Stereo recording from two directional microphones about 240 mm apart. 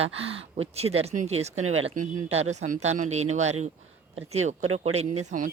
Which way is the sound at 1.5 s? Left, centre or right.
Right.